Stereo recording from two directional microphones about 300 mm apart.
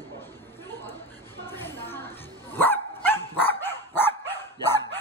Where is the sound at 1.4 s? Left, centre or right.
Centre.